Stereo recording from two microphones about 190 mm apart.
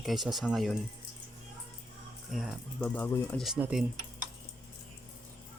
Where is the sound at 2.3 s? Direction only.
Centre (ahead or behind).